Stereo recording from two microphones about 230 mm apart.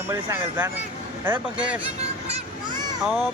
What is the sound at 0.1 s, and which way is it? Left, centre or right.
Speech, centre.